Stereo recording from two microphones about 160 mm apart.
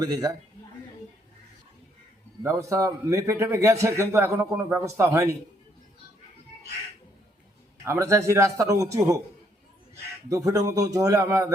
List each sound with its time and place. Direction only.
0.0 s a man's voice: 25° right (ahead or behind)
2.4 s a man's voice: 20° right (ahead or behind)
7.9 s a man's voice: 20° right (ahead or behind)
10.2 s a man's voice: 20° right (ahead or behind)